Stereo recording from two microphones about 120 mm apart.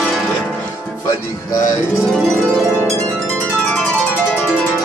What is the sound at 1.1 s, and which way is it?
Speech, 30° left (ahead or behind).